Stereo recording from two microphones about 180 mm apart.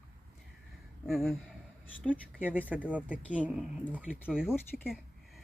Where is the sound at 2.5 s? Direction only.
10° right (ahead or behind).